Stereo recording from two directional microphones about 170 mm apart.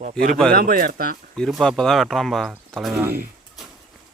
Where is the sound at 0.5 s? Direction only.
55° right (ahead or behind).